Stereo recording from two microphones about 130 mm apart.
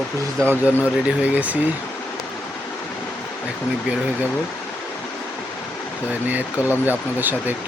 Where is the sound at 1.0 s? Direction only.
10° right (ahead or behind).